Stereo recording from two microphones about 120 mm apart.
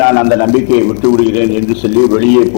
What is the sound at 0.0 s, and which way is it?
Speech, 20° left (ahead or behind).